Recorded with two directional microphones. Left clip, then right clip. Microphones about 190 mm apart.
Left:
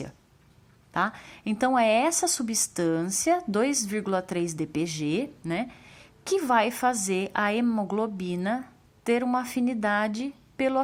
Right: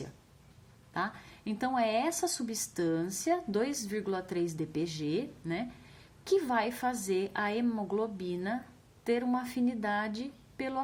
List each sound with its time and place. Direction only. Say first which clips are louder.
0.9 s speech: left 8 dB; 40° left (ahead or behind)